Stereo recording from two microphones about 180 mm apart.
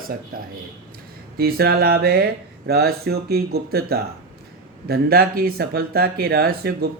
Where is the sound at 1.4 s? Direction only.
60° right (ahead or behind).